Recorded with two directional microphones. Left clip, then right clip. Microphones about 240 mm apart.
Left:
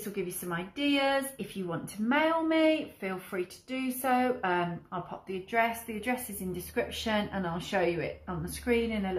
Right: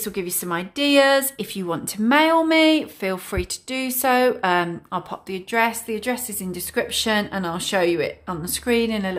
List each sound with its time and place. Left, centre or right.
0.1 s speech: right